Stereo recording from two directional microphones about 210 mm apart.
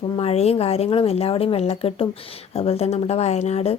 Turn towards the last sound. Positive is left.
turn(degrees=30)  # may be behind; listen again after turning